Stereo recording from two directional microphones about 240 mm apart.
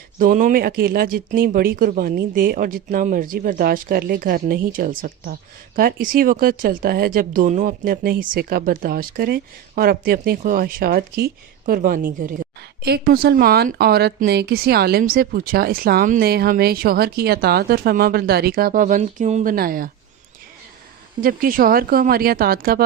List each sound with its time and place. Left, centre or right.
0.2 s speech: right
21.2 s speech: right